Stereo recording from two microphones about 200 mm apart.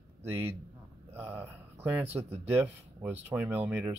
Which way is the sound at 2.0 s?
30° right (ahead or behind).